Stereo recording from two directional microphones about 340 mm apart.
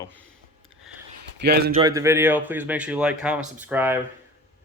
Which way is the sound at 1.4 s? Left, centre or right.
Right.